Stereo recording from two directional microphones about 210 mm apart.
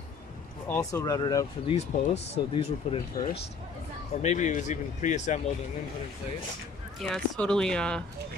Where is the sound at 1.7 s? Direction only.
30° left (ahead or behind).